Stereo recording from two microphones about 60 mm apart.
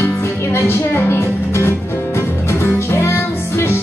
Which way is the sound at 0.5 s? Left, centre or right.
Left.